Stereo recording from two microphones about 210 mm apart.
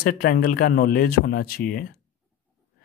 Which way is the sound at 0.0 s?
45° left (ahead or behind).